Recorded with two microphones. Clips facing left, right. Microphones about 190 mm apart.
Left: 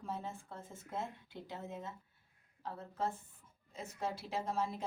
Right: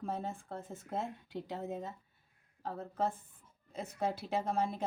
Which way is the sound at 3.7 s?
55° right (ahead or behind).